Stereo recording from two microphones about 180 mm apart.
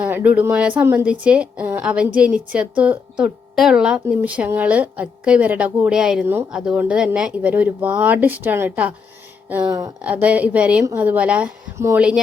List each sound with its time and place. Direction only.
0.1 s a woman's voice: 10° right (ahead or behind)
10.0 s a woman's voice: 10° right (ahead or behind)